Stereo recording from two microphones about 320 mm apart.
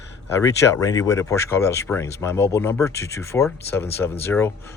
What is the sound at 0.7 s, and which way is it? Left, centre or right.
Speech, centre.